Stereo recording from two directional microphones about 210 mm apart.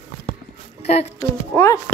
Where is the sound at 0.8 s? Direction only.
30° left (ahead or behind).